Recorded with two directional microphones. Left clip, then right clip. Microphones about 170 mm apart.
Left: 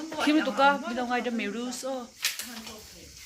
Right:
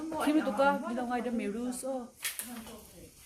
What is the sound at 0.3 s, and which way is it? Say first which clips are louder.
Speech: left 5 dB; 20° left (ahead or behind).